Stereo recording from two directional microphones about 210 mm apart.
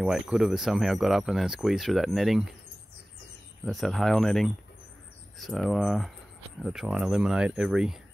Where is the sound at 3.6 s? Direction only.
Centre (ahead or behind).